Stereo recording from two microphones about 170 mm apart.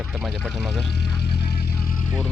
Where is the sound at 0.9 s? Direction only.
75° left (ahead or behind); by 2.0 s 55° left (ahead or behind).